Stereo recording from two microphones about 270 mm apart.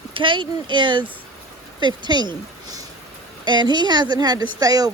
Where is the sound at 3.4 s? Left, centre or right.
Centre.